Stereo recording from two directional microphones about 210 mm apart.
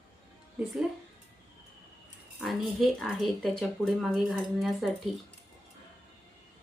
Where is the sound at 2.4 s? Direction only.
Centre (ahead or behind).